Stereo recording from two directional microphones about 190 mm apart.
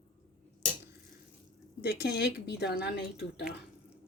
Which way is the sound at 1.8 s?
60° left (ahead or behind).